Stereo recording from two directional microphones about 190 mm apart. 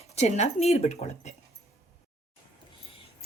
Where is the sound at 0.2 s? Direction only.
35° left (ahead or behind).